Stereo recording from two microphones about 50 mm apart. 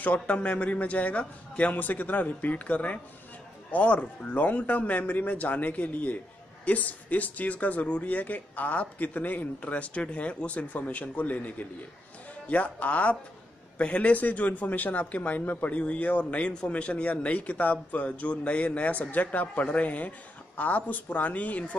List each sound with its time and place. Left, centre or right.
0.0 s speech: left
15.7 s speech: left